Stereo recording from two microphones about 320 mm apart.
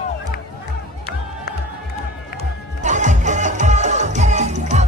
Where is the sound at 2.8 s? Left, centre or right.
Right.